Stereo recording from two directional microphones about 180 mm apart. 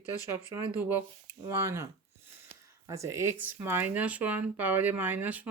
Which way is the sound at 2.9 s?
15° right (ahead or behind).